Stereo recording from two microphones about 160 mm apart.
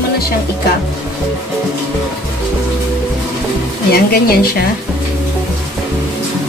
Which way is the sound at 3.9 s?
75° left (ahead or behind).